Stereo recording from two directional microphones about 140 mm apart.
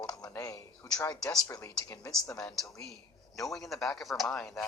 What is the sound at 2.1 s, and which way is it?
Speech, 5° left (ahead or behind).